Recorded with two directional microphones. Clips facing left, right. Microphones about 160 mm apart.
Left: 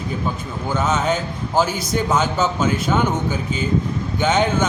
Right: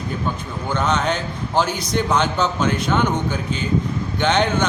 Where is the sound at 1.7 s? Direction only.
50° left (ahead or behind).